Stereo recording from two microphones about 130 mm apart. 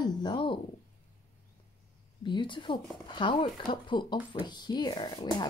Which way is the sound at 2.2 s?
35° left (ahead or behind).